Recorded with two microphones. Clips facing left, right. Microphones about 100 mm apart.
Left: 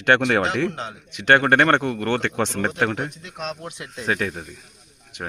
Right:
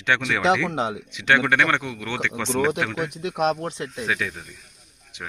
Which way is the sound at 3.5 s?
30° right (ahead or behind).